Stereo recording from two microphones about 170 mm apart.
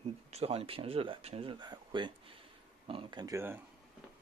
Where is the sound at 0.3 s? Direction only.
35° right (ahead or behind); by 3.6 s 15° right (ahead or behind).